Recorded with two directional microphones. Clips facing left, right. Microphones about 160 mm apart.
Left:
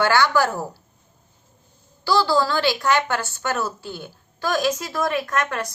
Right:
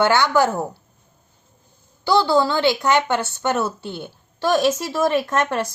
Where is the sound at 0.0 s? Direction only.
20° right (ahead or behind).